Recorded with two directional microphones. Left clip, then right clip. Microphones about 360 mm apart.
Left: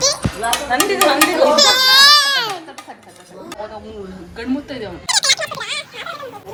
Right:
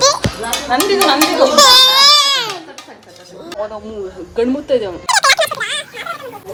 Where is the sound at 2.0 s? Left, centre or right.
Centre.